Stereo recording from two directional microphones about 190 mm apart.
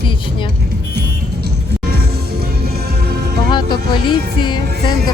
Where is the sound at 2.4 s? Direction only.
55° right (ahead or behind).